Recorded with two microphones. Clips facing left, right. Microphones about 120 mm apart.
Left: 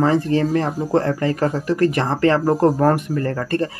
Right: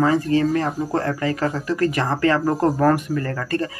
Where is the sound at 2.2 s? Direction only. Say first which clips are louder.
Left 3 dB; 35° left (ahead or behind).